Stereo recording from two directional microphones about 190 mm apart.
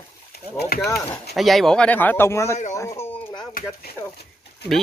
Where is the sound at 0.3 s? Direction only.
55° left (ahead or behind).